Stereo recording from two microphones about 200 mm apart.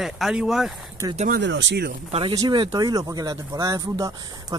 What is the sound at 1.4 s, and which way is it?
Speech, 65° right (ahead or behind).